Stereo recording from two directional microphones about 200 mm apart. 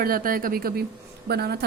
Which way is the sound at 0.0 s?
45° right (ahead or behind).